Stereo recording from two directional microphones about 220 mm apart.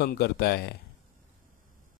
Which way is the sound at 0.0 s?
45° left (ahead or behind).